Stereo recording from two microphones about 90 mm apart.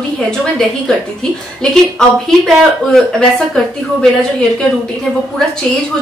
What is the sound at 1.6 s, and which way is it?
Speech, 5° left (ahead or behind).